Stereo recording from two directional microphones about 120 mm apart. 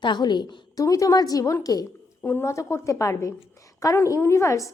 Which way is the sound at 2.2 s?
20° left (ahead or behind).